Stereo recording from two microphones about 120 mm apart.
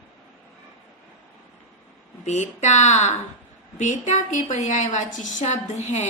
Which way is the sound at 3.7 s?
85° left.